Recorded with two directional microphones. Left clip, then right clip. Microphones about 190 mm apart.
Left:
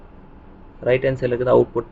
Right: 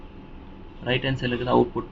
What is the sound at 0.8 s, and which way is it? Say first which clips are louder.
Speech: left 7 dB; 45° left (ahead or behind).